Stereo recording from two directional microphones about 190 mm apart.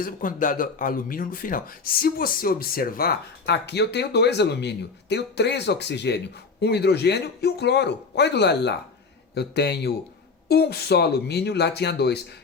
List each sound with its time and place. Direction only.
0.0 s speech: 45° left (ahead or behind)